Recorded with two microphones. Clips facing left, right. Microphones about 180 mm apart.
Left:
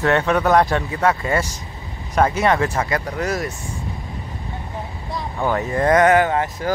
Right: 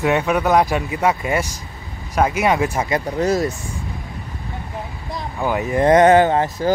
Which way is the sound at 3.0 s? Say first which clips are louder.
Right 5 dB; 25° right (ahead or behind).